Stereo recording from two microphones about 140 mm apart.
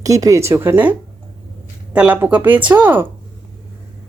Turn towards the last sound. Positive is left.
turn(degrees=-15)  # may be behind; listen again after turning